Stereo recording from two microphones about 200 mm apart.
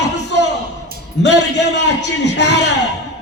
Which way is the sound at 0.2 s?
60° left (ahead or behind).